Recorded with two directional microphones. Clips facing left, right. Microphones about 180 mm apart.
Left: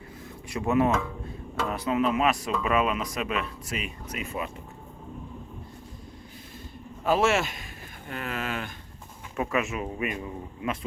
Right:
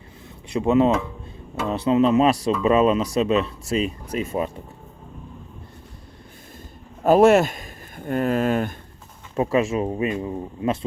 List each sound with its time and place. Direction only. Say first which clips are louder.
0.4 s speech: right 6 dB; 20° right (ahead or behind)
7.0 s a man's voice: right 9 dB; 45° right (ahead or behind)
9.3 s speech: right 8 dB; 30° right (ahead or behind)